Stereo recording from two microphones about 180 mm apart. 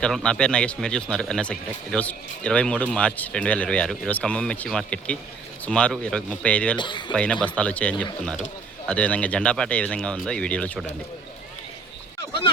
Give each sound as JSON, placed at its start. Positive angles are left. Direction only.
{"t": 0.0, "sound": "speech", "side_deg": 5}
{"t": 6.7, "sound": "speech", "side_deg": 25}
{"t": 7.4, "sound": "speech", "side_deg": 5}